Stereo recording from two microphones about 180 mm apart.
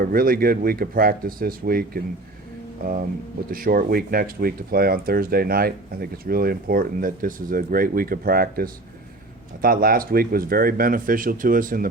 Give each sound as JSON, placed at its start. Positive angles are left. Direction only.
{"t": 0.0, "sound": "speech", "side_deg": -55}
{"t": 3.5, "sound": "speech", "side_deg": -50}